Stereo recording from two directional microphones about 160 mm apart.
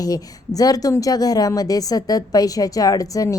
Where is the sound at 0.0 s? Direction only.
25° left (ahead or behind).